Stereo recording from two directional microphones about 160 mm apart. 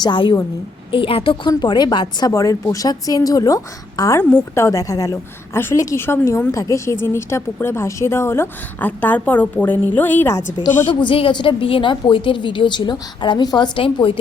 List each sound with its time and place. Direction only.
0.0 s a woman's voice: 30° left (ahead or behind); by 10.4 s 15° left (ahead or behind)
11.0 s a woman's voice: 35° left (ahead or behind)